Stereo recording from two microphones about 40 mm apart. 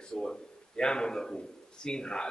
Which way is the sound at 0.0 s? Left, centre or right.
Left.